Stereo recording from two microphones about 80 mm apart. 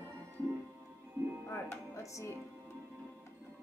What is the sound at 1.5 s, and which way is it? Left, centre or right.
Music, left.